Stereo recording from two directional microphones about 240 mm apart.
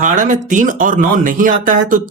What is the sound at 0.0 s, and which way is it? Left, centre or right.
Speech, right.